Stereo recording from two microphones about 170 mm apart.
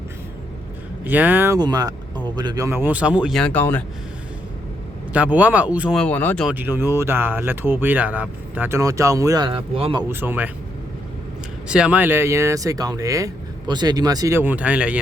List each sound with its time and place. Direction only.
1.0 s speech: 10° right (ahead or behind)
1.5 s speech: 20° right (ahead or behind); by 3.8 s 10° left (ahead or behind)
5.1 s speech: 10° right (ahead or behind)
6.0 s speech: 10° left (ahead or behind)
6.5 s speech: 10° right (ahead or behind); by 10.1 s 30° right (ahead or behind)
10.1 s speech: 10° right (ahead or behind)
11.7 s speech: 5° right (ahead or behind)